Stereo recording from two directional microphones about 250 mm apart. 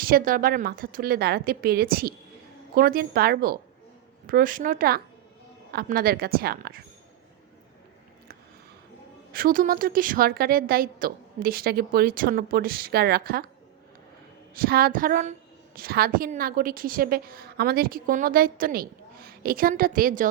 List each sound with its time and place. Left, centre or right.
0.0 s a woman's voice: right
9.3 s a woman's voice: right
14.5 s a woman's voice: right